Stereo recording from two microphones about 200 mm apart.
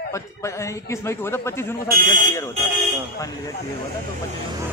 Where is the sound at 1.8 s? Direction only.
45° right (ahead or behind).